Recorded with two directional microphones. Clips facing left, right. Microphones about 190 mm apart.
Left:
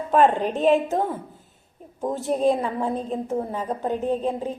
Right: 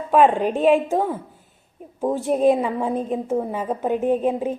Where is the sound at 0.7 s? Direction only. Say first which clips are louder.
Right 1 dB; 15° right (ahead or behind).